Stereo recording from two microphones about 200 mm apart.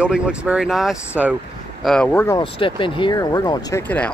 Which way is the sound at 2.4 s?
25° left (ahead or behind).